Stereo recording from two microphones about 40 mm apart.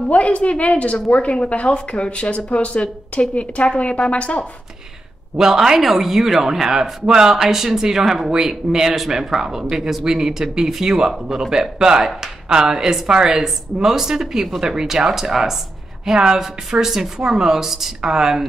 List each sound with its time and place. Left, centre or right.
0.1 s a woman's voice: left
5.4 s speech: centre